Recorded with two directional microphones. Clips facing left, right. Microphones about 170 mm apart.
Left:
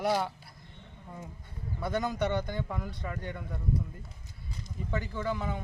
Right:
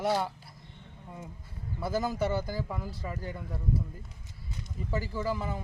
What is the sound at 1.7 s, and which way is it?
Speech, 5° right (ahead or behind).